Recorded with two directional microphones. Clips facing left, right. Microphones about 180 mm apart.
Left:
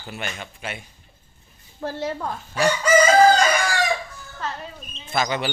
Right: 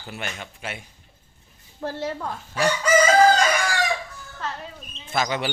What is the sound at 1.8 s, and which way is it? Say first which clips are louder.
Speech: left 1 dB; 15° left (ahead or behind).